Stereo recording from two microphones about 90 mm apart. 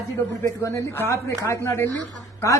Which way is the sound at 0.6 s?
35° left (ahead or behind).